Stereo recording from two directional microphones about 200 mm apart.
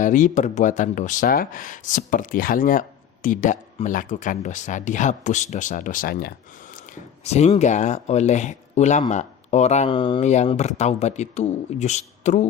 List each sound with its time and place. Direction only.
0.0 s speech: 40° left (ahead or behind)
6.9 s speech: 35° left (ahead or behind)